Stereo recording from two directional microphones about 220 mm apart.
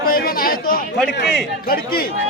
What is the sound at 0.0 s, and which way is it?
Chatter, 40° left (ahead or behind).